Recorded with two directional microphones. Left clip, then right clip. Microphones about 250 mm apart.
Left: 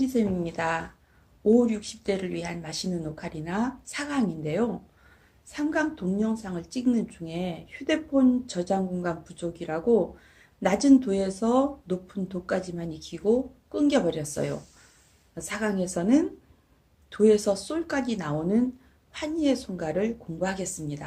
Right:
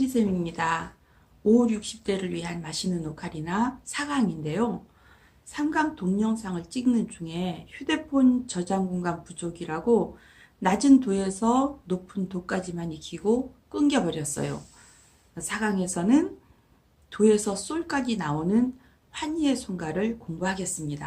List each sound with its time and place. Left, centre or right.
0.0 s a woman's voice: centre